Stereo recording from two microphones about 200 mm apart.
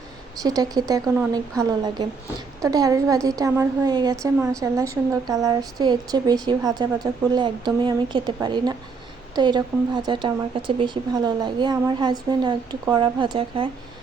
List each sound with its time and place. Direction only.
0.4 s a woman's voice: 20° right (ahead or behind)